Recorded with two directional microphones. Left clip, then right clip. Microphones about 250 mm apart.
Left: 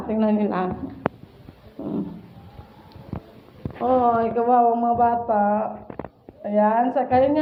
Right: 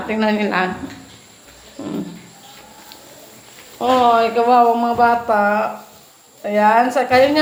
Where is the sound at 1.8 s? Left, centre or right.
Right.